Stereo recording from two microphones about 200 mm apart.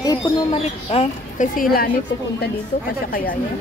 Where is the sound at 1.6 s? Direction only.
45° left (ahead or behind).